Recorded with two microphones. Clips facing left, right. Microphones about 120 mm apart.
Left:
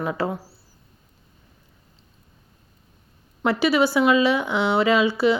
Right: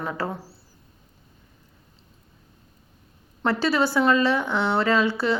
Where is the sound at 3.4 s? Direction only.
15° left (ahead or behind).